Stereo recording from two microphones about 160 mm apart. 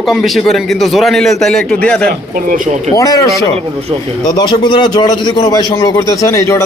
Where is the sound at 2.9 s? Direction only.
20° left (ahead or behind).